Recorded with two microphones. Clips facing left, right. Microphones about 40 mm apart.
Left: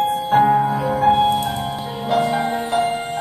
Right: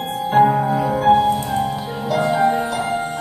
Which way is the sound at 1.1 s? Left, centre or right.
Left.